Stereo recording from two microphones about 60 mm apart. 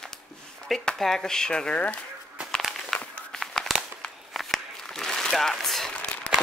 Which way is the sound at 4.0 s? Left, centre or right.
Centre.